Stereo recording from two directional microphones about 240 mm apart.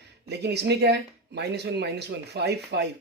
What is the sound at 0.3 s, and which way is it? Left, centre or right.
Speech, right.